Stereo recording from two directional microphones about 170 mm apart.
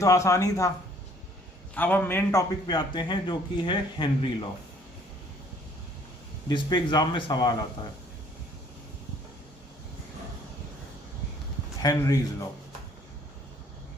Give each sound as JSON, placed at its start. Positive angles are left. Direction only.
{"t": 0.0, "sound": "speech", "side_deg": 15}
{"t": 1.7, "sound": "speech", "side_deg": 10}
{"t": 2.6, "sound": "speech", "side_deg": 25}
{"t": 6.5, "sound": "speech", "side_deg": 25}
{"t": 11.8, "sound": "speech", "side_deg": 20}